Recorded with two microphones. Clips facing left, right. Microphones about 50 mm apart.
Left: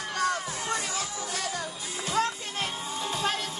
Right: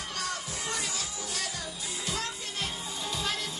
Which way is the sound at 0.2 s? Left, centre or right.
Left.